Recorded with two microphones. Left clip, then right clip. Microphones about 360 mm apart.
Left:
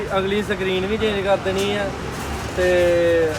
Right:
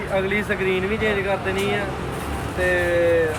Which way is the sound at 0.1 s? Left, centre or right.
Centre.